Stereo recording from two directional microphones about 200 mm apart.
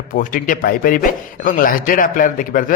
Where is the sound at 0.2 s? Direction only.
40° left (ahead or behind).